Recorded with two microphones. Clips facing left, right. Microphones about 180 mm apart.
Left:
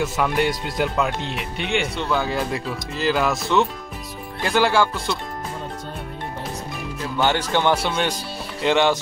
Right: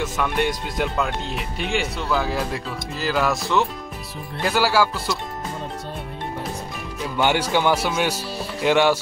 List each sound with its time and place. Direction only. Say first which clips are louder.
0.4 s speech: even; centre (ahead or behind)
7.2 s speech: right 1 dB; 10° right (ahead or behind)